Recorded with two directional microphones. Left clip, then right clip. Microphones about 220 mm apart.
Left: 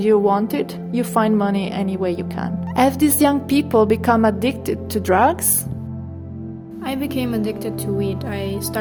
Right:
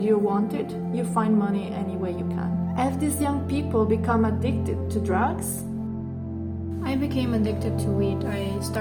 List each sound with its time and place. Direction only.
0.0 s speech: 50° left (ahead or behind)
6.8 s speech: 45° left (ahead or behind)